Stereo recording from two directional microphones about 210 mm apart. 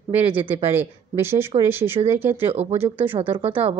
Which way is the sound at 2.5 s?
30° right (ahead or behind).